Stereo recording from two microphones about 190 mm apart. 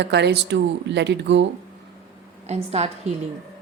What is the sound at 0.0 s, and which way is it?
A woman's voice, 65° right (ahead or behind).